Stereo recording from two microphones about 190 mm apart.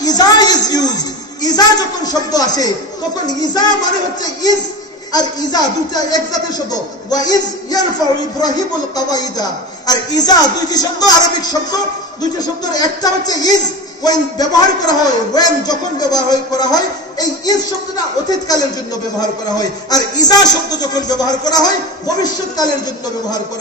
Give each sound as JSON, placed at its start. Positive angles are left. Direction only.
{"t": 0.0, "sound": "a sound", "side_deg": 20}
{"t": 3.3, "sound": "a man's voice", "side_deg": 20}
{"t": 19.1, "sound": "a man's voice", "side_deg": 20}